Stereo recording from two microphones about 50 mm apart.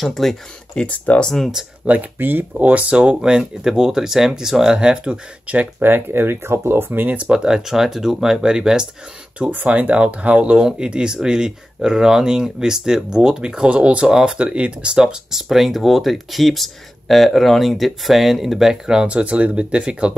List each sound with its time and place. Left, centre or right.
0.0 s speech: centre
0.7 s speech: left
1.2 s speech: centre
1.9 s speech: right
2.5 s speech: right
5.8 s speech: right
7.2 s speech: centre
9.4 s speech: right; by 19.0 s centre
19.0 s speech: right